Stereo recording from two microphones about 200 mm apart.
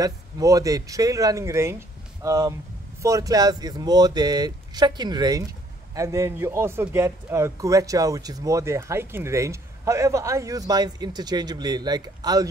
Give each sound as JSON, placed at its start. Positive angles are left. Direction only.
{"t": 0.0, "sound": "a man's voice", "side_deg": -15}